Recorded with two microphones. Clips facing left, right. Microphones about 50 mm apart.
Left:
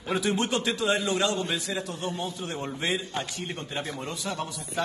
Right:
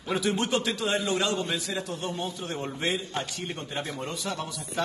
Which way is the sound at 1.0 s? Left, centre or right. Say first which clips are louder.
Left 1 dB; right.